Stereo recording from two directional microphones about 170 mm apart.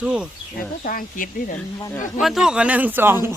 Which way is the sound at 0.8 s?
55° left (ahead or behind).